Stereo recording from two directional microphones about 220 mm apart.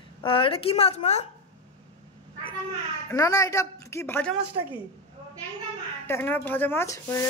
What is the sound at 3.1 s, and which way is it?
A woman's voice, 15° left (ahead or behind).